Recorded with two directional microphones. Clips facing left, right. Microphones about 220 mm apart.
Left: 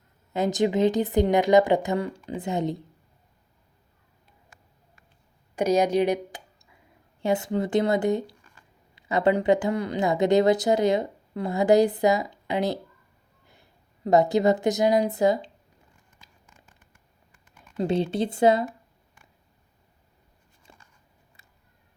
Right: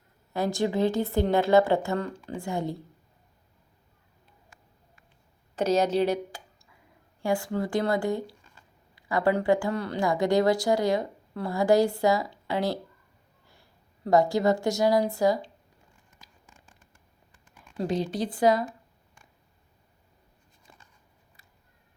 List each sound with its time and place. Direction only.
0.3 s speech: 20° left (ahead or behind)
5.5 s a woman's voice: 15° left (ahead or behind)
17.7 s speech: 25° left (ahead or behind)
20.7 s a sound: 25° left (ahead or behind)